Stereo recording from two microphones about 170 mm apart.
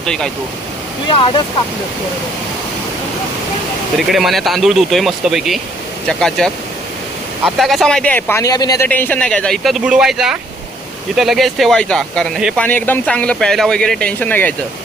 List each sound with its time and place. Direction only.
0.0 s speech: 5° left (ahead or behind)
1.0 s speech: 30° left (ahead or behind)
4.1 s speech: centre (ahead or behind); by 8.9 s 20° left (ahead or behind)
8.9 s speech: 10° left (ahead or behind)
12.6 s speech: 10° left (ahead or behind)